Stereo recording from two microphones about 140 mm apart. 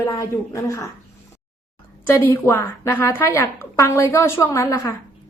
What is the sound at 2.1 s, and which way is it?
A woman's voice, 15° left (ahead or behind).